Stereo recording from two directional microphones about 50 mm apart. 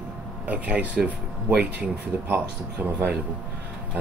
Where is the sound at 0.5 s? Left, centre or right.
Right.